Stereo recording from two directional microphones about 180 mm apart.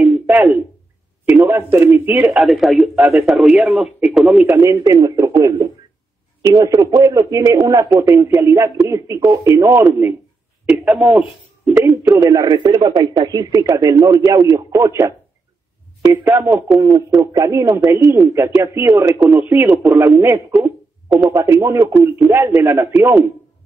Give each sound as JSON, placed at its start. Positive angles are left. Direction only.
{"t": 0.0, "sound": "a sound", "side_deg": -10}
{"t": 1.2, "sound": "speech", "side_deg": -10}
{"t": 4.5, "sound": "speech", "side_deg": -15}